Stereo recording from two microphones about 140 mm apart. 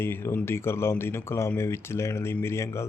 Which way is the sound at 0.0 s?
15° left (ahead or behind).